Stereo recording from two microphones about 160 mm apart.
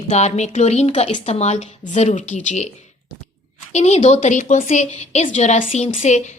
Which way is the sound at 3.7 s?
45° left (ahead or behind).